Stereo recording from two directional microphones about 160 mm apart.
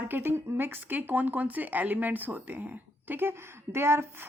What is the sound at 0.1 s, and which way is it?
A woman's voice, 15° right (ahead or behind).